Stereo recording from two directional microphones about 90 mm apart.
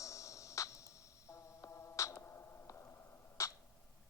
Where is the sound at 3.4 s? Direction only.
35° left (ahead or behind).